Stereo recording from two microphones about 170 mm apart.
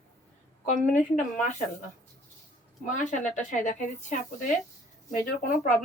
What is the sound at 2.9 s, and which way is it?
Speech, 45° left (ahead or behind).